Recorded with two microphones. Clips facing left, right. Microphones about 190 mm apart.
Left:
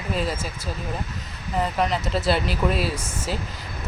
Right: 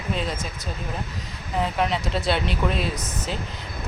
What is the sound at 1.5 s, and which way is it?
Speech, centre (ahead or behind).